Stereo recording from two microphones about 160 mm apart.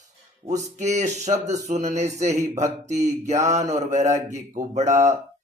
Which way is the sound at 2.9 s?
20° right (ahead or behind).